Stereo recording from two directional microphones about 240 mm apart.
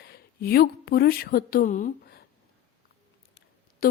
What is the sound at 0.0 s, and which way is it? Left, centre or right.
Speech, left.